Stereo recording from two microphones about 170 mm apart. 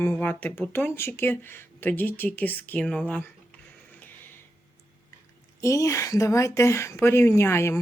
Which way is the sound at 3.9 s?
10° left (ahead or behind).